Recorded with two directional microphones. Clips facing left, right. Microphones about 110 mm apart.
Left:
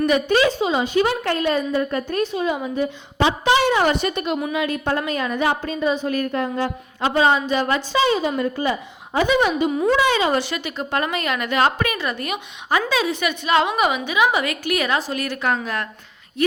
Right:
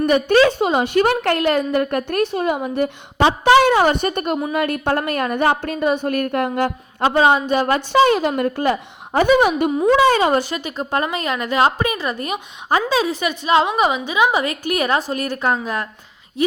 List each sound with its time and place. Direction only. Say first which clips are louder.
0.0 s a woman's voice: right 3 dB; 50° right (ahead or behind)
3.2 s a woman's voice: right 4 dB; 40° right (ahead or behind)
3.5 s a woman's voice: right 5 dB; 50° right (ahead or behind)
7.3 s a woman's voice: right 3 dB; 50° right (ahead or behind)
7.8 s a woman's voice: right 5 dB; 60° right (ahead or behind)
9.1 s a woman's voice: right 4 dB; 50° right (ahead or behind)